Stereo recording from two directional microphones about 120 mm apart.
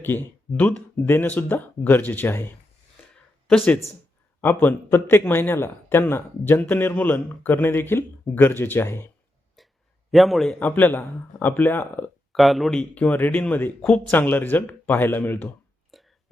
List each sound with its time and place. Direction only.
0.0 s a man's voice: 15° left (ahead or behind)
4.4 s a man's voice: 15° left (ahead or behind)
9.6 s a sound: centre (ahead or behind)
10.1 s a man's voice: centre (ahead or behind)
10.6 s a man's voice: 15° left (ahead or behind)
12.3 s a man's voice: centre (ahead or behind)
12.9 s a man's voice: 10° left (ahead or behind)
15.9 s a sound: centre (ahead or behind)